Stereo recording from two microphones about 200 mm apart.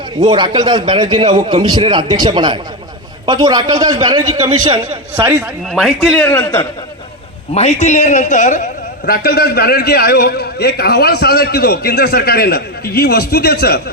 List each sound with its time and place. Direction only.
0.2 s a man's voice: 20° right (ahead or behind)
5.7 s a man's voice: centre (ahead or behind)
7.5 s a man's voice: 35° left (ahead or behind); by 13.8 s 50° left (ahead or behind)